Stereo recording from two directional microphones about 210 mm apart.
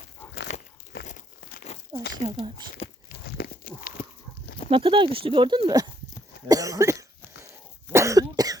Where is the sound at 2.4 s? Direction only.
Centre (ahead or behind).